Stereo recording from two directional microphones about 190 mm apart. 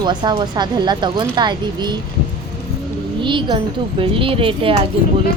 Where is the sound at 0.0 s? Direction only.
25° right (ahead or behind).